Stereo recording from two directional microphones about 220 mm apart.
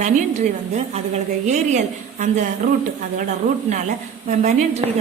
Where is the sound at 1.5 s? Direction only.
30° right (ahead or behind).